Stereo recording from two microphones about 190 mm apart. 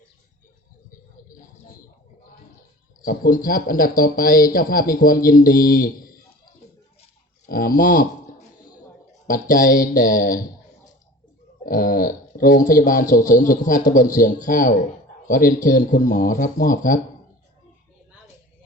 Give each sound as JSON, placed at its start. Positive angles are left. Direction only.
{"t": 3.0, "sound": "speech", "side_deg": 45}
{"t": 7.4, "sound": "speech", "side_deg": 50}
{"t": 9.2, "sound": "speech", "side_deg": 45}
{"t": 11.6, "sound": "speech", "side_deg": 45}